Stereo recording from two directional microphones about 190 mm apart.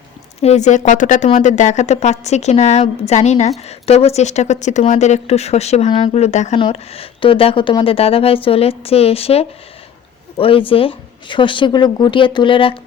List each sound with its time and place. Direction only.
0.4 s speech: 35° left (ahead or behind)